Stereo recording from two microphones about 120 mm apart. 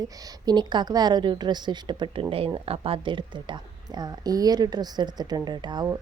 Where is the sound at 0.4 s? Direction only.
40° right (ahead or behind).